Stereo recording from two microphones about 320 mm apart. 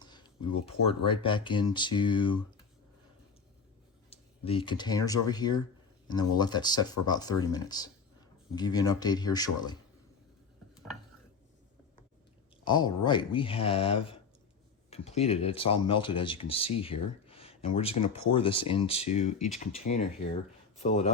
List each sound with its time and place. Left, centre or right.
0.0 s speech: centre
4.1 s speech: centre
12.6 s speech: centre